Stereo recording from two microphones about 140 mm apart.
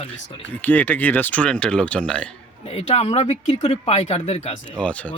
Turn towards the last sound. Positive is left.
turn(degrees=10)  # may be behind; listen again after turning